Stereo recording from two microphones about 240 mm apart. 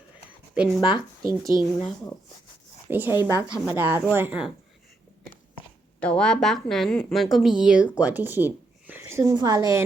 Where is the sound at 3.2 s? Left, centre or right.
Centre.